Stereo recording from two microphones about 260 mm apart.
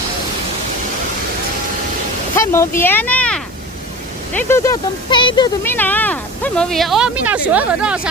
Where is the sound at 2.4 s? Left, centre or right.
Centre.